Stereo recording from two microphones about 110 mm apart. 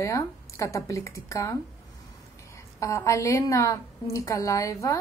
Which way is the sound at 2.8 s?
30° left (ahead or behind).